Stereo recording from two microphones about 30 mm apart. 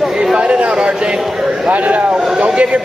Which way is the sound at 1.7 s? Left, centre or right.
Right.